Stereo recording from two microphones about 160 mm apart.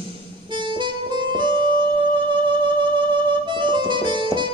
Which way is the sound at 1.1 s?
30° right (ahead or behind).